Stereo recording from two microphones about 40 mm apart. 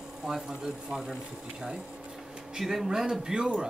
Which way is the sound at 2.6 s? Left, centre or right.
Centre.